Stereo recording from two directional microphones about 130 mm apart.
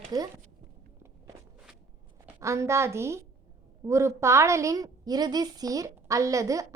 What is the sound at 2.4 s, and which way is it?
A woman's voice, 20° right (ahead or behind).